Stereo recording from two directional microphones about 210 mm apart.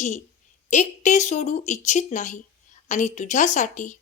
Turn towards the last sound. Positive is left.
turn(degrees=35)  # may be behind; listen again after turning